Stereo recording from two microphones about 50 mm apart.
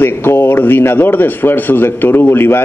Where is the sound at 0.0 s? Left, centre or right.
Left.